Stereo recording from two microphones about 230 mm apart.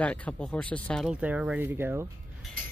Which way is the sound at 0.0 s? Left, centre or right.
Centre.